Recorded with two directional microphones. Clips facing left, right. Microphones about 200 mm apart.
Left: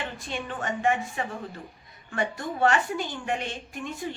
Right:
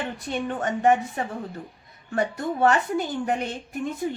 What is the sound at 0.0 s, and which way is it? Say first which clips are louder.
A woman's voice: right 5 dB; 45° right (ahead or behind).